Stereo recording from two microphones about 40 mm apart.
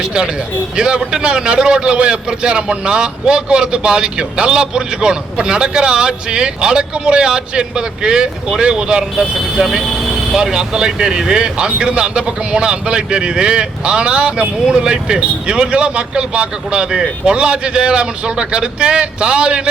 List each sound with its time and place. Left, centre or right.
0.0 s a man's voice: right
9.1 s a man's voice: centre; by 19.6 s right